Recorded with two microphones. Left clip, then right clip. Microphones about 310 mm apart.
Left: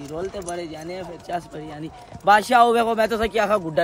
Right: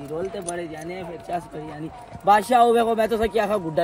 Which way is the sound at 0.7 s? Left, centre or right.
Centre.